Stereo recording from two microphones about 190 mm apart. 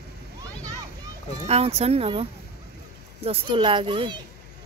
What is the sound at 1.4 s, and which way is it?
A child's voice, 35° right (ahead or behind).